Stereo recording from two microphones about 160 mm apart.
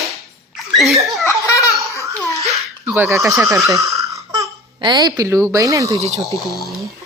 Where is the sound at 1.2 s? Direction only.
20° left (ahead or behind).